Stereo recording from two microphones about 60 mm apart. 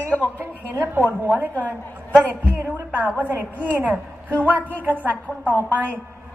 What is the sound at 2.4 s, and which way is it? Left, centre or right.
A man's voice, right.